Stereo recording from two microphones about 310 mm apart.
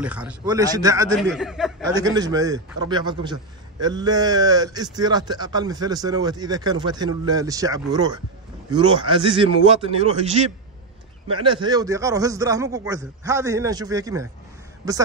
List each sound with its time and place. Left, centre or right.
0.0 s a man's voice: centre